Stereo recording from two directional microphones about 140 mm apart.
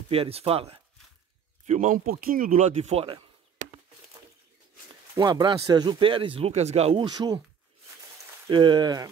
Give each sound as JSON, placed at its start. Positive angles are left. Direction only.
{"t": 0.1, "sound": "speech", "side_deg": -45}
{"t": 1.7, "sound": "speech", "side_deg": -65}
{"t": 5.1, "sound": "speech", "side_deg": -30}
{"t": 7.0, "sound": "speech", "side_deg": -30}
{"t": 8.5, "sound": "speech", "side_deg": -35}